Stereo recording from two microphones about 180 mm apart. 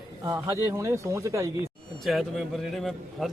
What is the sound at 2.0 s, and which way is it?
Speech, centre (ahead or behind).